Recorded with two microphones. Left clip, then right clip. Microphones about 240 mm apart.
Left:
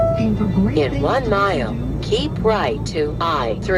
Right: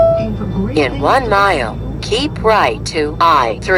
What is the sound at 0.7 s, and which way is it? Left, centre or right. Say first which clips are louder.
Speech: right 7 dB; right.